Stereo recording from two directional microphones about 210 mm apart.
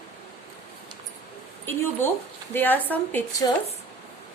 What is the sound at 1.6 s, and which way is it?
A woman's voice, 10° left (ahead or behind).